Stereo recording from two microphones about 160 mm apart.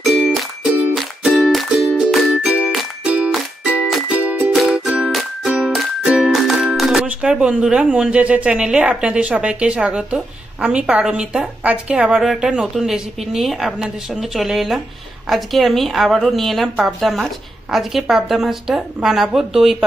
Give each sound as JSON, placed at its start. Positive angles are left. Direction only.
{"t": 0.0, "sound": "music", "side_deg": 0}
{"t": 15.2, "sound": "a woman's voice", "side_deg": 0}